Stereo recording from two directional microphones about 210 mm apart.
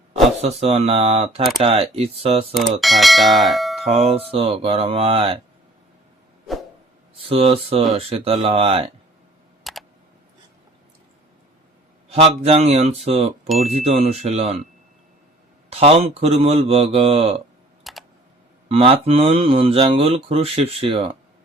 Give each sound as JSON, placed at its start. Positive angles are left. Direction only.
{"t": 0.4, "sound": "speech", "side_deg": -30}
{"t": 2.8, "sound": "speech", "side_deg": 0}
{"t": 3.8, "sound": "speech", "side_deg": -25}
{"t": 7.2, "sound": "speech", "side_deg": -25}
{"t": 9.7, "sound": "a sound", "side_deg": 0}
{"t": 12.0, "sound": "speech", "side_deg": -30}
{"t": 13.5, "sound": "speech", "side_deg": 0}
{"t": 13.7, "sound": "speech", "side_deg": -30}
{"t": 15.7, "sound": "speech", "side_deg": -25}
{"t": 17.9, "sound": "typing", "side_deg": 0}
{"t": 18.7, "sound": "speech", "side_deg": -25}